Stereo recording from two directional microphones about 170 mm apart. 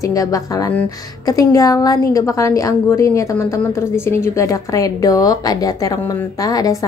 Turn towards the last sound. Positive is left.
turn(degrees=20)  # may be behind; listen again after turning